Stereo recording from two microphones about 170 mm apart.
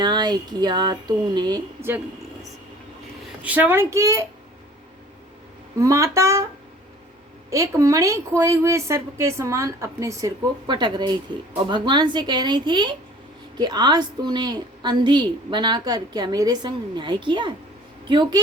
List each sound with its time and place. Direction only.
0.0 s a woman's voice: 25° right (ahead or behind)
3.4 s a woman's voice: 10° right (ahead or behind)
5.8 s a woman's voice: 15° right (ahead or behind)
7.5 s a woman's voice: 15° right (ahead or behind)